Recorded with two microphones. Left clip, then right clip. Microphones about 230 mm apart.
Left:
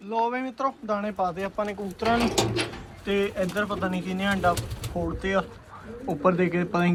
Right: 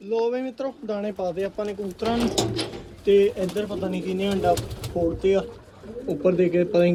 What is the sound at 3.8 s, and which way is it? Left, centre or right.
Speech, left.